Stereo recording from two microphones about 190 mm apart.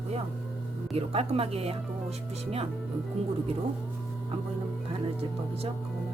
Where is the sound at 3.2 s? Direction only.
30° right (ahead or behind).